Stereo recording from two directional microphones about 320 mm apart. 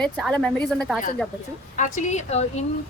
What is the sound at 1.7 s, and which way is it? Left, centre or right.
Speech, left.